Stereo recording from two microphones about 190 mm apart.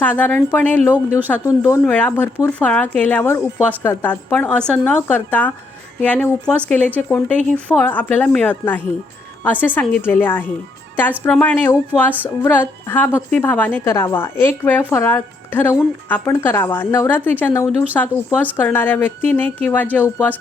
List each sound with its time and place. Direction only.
0.0 s a woman's voice: 10° left (ahead or behind)